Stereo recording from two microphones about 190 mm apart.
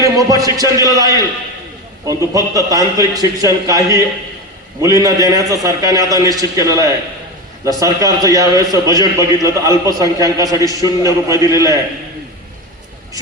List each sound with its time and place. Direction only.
0.0 s a man's voice: 20° right (ahead or behind)
2.0 s a man's voice: 15° right (ahead or behind)